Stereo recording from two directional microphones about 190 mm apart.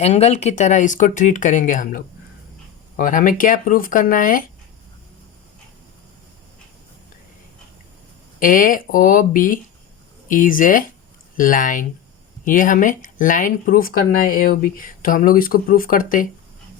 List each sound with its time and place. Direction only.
0.0 s speech: 35° left (ahead or behind)
8.4 s speech: 45° left (ahead or behind)